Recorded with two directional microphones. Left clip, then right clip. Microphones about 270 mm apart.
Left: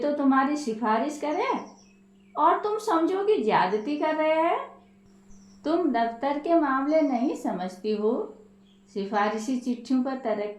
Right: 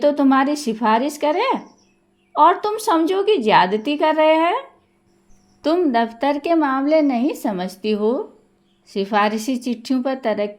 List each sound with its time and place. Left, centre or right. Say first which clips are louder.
0.0 s a woman's voice: right 8 dB; right
5.6 s a woman's voice: right 7 dB; right